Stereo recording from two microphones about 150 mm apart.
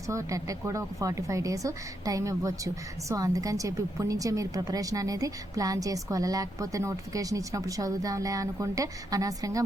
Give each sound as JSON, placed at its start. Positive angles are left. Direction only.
{"t": 0.1, "sound": "a woman's voice", "side_deg": -20}